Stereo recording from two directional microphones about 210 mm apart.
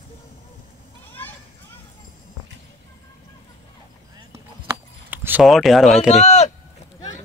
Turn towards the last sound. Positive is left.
turn(degrees=35)  # may be behind; listen again after turning